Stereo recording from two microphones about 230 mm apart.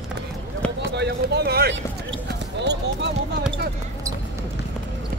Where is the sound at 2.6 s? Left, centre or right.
Right.